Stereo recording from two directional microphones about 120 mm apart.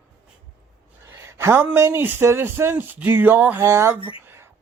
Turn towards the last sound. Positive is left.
turn(degrees=-20)  # may be behind; listen again after turning